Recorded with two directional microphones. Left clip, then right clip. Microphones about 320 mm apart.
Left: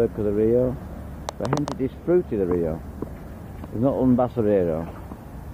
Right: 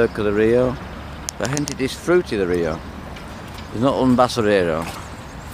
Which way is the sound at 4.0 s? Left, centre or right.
Centre.